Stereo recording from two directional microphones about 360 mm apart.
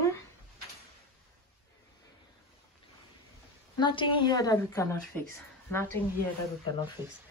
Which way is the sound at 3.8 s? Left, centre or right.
Centre.